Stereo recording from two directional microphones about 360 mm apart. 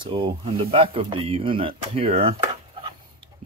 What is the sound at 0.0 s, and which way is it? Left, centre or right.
Speech, centre.